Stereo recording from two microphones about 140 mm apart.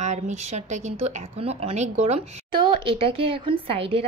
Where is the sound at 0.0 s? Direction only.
55° right (ahead or behind).